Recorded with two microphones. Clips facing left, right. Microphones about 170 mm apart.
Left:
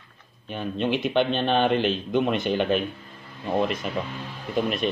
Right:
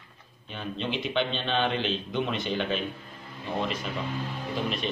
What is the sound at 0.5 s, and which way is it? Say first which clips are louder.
A man's voice: left 7 dB; 55° left (ahead or behind).